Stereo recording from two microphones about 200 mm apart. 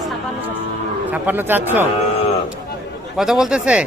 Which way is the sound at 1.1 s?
10° right (ahead or behind).